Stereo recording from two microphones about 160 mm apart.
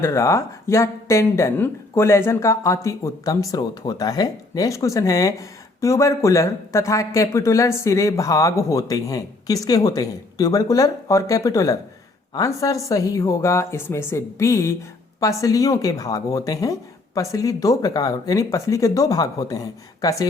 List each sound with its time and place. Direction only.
0.0 s speech: 20° left (ahead or behind)